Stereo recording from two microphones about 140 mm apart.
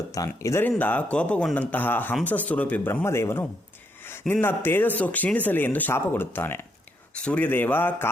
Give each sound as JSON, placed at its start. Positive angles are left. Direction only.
{"t": 0.3, "sound": "speech", "side_deg": 15}